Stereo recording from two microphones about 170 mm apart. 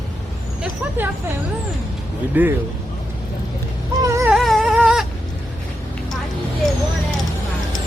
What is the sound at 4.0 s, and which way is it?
Wail, 15° right (ahead or behind).